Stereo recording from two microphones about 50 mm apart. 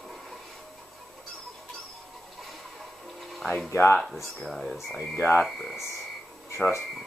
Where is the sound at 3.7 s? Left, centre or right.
Left.